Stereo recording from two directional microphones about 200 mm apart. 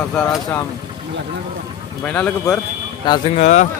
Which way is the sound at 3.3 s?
35° left (ahead or behind).